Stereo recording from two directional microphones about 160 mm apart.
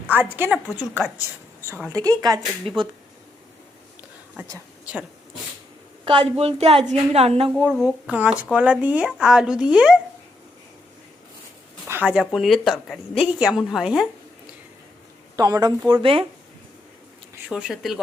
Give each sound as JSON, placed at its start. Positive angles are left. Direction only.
{"t": 0.1, "sound": "a woman's voice", "side_deg": -10}
{"t": 1.6, "sound": "a woman's voice", "side_deg": -15}
{"t": 6.1, "sound": "a woman's voice", "side_deg": -35}
{"t": 7.5, "sound": "speech", "side_deg": -5}
{"t": 11.9, "sound": "a sound", "side_deg": -10}
{"t": 12.3, "sound": "speech", "side_deg": 0}
{"t": 15.4, "sound": "a woman's voice", "side_deg": -25}
{"t": 17.5, "sound": "speech", "side_deg": -5}